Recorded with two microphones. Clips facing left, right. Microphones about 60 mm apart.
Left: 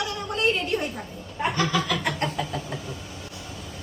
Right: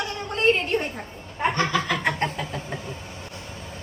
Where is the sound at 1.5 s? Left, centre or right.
Right.